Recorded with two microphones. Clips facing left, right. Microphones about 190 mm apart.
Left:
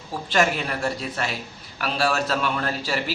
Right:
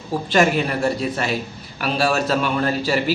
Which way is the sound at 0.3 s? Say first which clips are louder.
Right 5 dB; 5° right (ahead or behind).